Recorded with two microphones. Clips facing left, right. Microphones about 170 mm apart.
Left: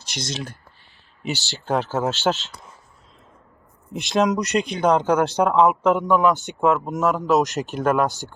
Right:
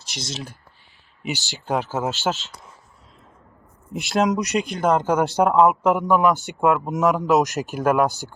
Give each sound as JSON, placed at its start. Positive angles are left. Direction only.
{"t": 0.0, "sound": "speech", "side_deg": 0}
{"t": 1.2, "sound": "speech", "side_deg": -15}
{"t": 4.0, "sound": "speech", "side_deg": 0}
{"t": 7.0, "sound": "speech", "side_deg": -15}
{"t": 7.4, "sound": "speech", "side_deg": -5}